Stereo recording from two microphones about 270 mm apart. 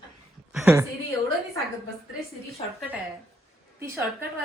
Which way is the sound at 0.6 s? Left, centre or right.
Centre.